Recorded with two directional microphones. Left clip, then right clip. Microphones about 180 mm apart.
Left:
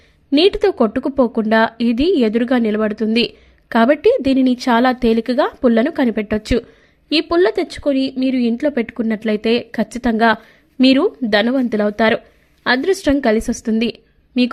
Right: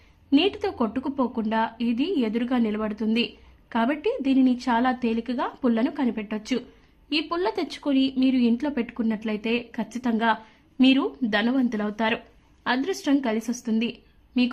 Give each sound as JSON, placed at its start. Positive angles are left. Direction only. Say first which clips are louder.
{"t": 0.3, "sound": "a woman's voice", "louder": "left 10 dB", "side_deg": 35}